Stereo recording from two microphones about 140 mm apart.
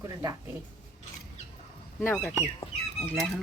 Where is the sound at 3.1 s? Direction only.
Centre (ahead or behind).